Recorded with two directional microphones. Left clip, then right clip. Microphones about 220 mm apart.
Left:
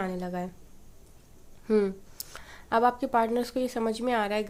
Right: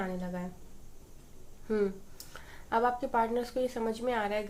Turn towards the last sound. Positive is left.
turn(degrees=50)  # may be behind; listen again after turning